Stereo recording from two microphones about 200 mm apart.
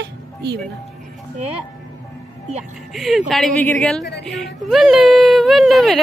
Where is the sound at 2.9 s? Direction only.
Centre (ahead or behind).